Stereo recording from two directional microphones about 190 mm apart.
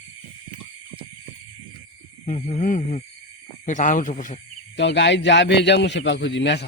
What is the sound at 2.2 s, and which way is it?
Speech, 35° left (ahead or behind).